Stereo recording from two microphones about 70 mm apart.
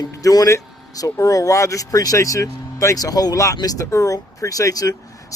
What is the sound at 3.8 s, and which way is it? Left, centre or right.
Speech, left.